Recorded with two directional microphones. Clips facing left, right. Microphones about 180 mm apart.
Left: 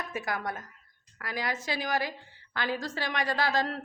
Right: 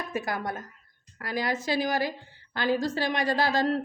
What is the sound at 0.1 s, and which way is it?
A woman's voice, 30° right (ahead or behind).